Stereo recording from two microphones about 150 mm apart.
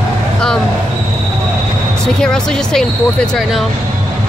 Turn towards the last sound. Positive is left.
turn(degrees=0)  # may be behind; listen again after turning